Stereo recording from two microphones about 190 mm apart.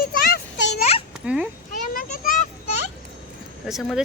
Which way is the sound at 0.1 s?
60° left (ahead or behind).